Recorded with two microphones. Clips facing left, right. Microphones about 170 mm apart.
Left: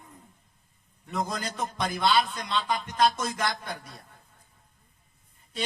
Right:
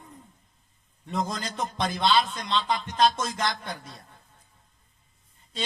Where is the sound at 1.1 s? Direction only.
25° right (ahead or behind).